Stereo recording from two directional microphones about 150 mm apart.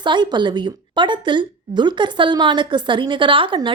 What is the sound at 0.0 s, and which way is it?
A woman's voice, 30° right (ahead or behind).